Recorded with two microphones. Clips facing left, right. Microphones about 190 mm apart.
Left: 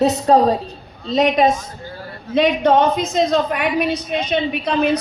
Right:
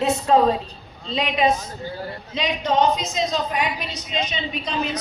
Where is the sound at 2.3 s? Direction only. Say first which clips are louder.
Left 10 dB; 55° left (ahead or behind).